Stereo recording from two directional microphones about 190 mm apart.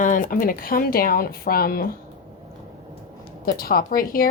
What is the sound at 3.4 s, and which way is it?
Speech, 50° left (ahead or behind).